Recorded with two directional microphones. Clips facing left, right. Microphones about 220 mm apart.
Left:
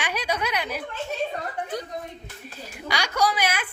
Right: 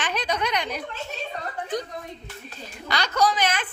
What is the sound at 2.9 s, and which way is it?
Speech, 10° left (ahead or behind).